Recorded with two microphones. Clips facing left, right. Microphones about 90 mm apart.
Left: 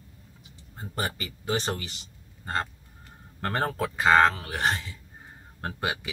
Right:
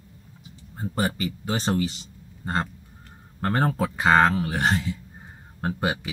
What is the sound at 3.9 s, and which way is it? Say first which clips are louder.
Speech: even; 5° right (ahead or behind).